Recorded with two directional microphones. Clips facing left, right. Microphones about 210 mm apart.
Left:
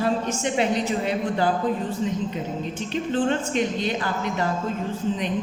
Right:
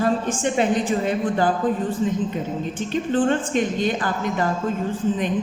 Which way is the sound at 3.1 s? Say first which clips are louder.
Right 3 dB; 50° right (ahead or behind).